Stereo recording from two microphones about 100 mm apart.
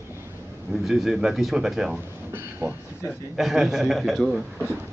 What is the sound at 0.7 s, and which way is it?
Speech, centre (ahead or behind).